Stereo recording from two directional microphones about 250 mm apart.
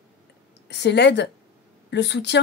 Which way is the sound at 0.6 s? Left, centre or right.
Left.